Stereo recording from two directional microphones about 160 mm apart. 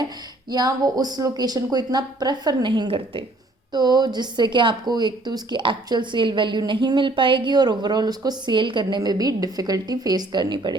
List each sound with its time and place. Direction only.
0.5 s a woman's voice: 25° right (ahead or behind)